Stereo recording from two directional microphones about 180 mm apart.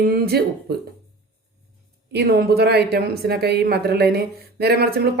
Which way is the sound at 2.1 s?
60° right (ahead or behind).